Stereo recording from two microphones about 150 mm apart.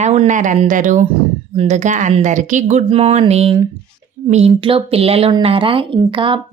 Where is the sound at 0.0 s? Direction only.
45° right (ahead or behind).